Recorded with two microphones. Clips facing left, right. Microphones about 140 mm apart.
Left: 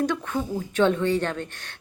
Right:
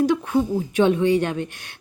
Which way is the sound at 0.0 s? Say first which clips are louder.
Right 6 dB; 10° right (ahead or behind).